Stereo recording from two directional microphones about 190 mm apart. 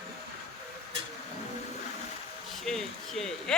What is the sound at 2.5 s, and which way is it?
Speech, centre (ahead or behind).